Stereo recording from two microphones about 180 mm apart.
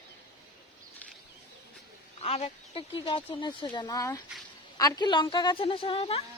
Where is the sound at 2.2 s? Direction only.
35° left (ahead or behind).